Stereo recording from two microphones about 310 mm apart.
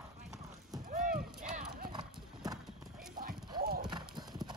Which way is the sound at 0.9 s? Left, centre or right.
Right.